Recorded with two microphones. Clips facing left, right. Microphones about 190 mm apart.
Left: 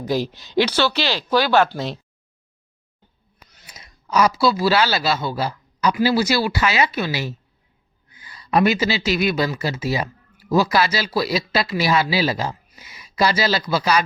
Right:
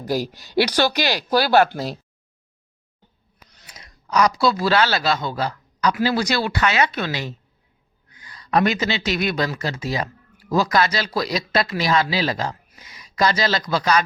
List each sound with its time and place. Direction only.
0.1 s speech: 10° right (ahead or behind)
1.3 s speech: 40° right (ahead or behind)
3.8 s speech: 5° left (ahead or behind)